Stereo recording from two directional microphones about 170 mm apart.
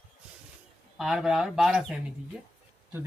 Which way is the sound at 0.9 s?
5° right (ahead or behind).